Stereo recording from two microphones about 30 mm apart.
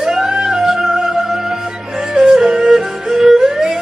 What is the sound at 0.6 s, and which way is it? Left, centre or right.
Music, centre.